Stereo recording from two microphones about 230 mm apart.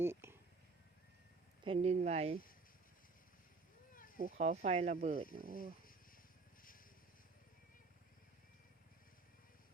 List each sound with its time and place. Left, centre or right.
0.0 s a sound: centre
1.6 s speech: right
3.9 s a sound: left
4.4 s speech: right
5.4 s speech: right
6.6 s vehicle: left